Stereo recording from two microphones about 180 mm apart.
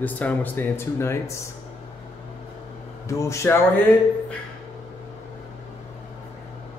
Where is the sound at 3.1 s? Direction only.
15° left (ahead or behind).